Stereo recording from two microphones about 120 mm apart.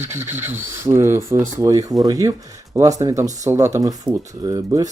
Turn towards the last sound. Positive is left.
turn(degrees=-30)  # may be behind; listen again after turning